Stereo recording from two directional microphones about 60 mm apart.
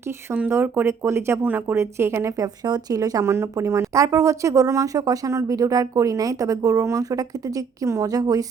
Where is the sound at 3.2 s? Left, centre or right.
Right.